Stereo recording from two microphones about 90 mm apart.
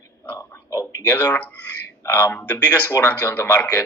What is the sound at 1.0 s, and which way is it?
A man's voice, 15° left (ahead or behind).